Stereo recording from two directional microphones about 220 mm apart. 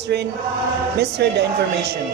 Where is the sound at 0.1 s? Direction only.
50° right (ahead or behind).